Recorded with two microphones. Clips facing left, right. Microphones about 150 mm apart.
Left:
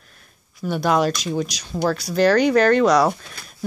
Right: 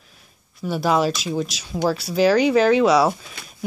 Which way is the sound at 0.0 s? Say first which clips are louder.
Even; centre (ahead or behind).